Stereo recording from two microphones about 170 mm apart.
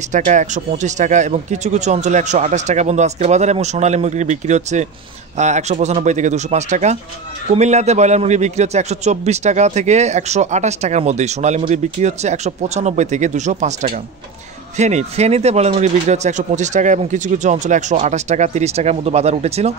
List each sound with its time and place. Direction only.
0.1 s a man's voice: 45° right (ahead or behind)
14.8 s speech: 40° right (ahead or behind)